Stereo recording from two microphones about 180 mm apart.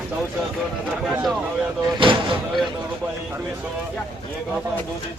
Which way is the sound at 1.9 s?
30° right (ahead or behind).